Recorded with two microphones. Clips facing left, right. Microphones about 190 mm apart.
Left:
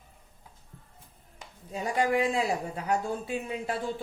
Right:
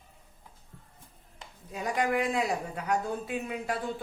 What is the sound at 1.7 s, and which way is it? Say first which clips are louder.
Speech: left 2 dB; 30° left (ahead or behind).